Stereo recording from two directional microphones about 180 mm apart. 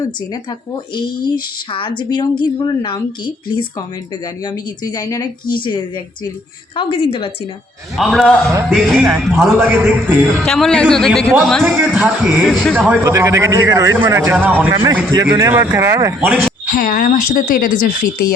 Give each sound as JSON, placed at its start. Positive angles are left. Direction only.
{"t": 1.7, "sound": "a woman's voice", "side_deg": 25}
{"t": 7.9, "sound": "a man's voice", "side_deg": 0}
{"t": 13.0, "sound": "speech", "side_deg": -15}
{"t": 16.7, "sound": "speech", "side_deg": 50}